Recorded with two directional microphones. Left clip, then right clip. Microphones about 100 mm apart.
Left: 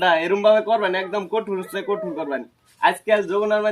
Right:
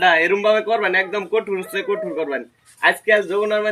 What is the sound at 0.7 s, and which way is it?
A man's voice, 25° left (ahead or behind).